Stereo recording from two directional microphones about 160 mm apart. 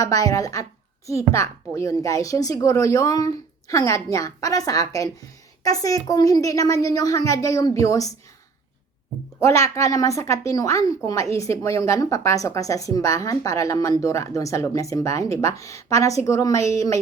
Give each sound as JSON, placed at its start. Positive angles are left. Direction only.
{"t": 0.0, "sound": "a woman's voice", "side_deg": 20}
{"t": 9.4, "sound": "a woman's voice", "side_deg": 20}